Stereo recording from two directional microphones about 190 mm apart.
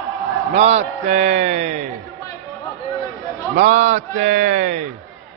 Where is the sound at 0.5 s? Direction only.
35° right (ahead or behind).